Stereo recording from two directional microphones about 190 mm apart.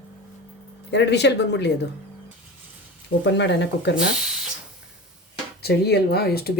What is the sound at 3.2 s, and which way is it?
Speech, 65° left (ahead or behind).